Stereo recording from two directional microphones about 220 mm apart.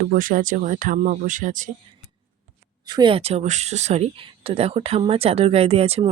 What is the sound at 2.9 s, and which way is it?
Speech, 20° right (ahead or behind).